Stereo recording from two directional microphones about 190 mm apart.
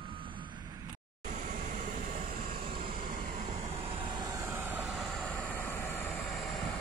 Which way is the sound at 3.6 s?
30° right (ahead or behind).